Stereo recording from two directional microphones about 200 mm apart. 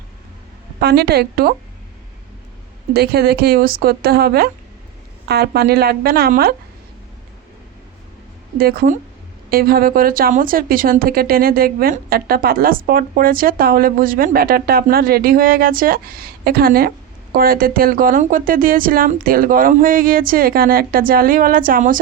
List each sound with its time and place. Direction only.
0.8 s speech: 55° right (ahead or behind)
2.9 s speech: 50° right (ahead or behind)
8.5 s speech: 50° right (ahead or behind)